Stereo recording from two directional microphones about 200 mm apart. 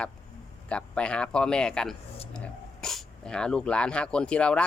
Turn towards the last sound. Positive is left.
turn(degrees=5)  # may be behind; listen again after turning